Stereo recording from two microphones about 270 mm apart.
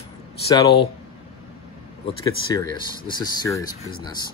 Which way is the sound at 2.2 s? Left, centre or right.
Centre.